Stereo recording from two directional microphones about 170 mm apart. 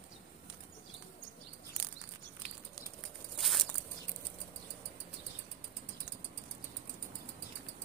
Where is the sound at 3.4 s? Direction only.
Centre (ahead or behind).